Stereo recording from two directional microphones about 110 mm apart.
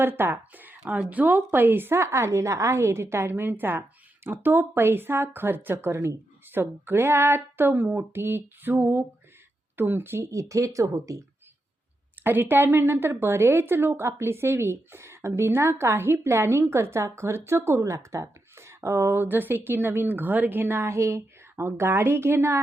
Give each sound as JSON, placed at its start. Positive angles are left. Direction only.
{"t": 0.0, "sound": "a woman's voice", "side_deg": -20}
{"t": 12.2, "sound": "a woman's voice", "side_deg": -20}